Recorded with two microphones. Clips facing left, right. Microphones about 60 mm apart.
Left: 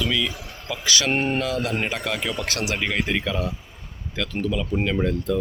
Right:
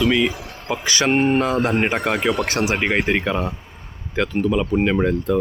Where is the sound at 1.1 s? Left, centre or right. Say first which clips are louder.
Right 9 dB; centre.